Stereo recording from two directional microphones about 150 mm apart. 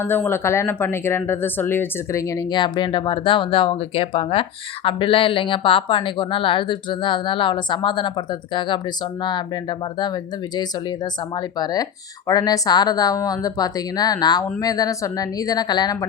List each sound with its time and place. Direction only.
0.0 s a woman's voice: 15° left (ahead or behind)